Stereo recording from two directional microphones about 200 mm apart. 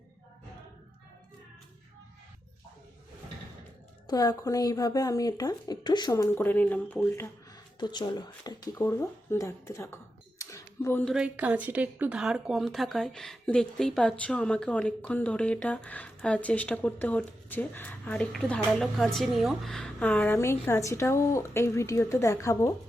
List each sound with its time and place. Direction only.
4.0 s speech: 20° left (ahead or behind)
7.8 s speech: 20° left (ahead or behind)
11.0 s speech: 5° right (ahead or behind); by 22.7 s 15° left (ahead or behind)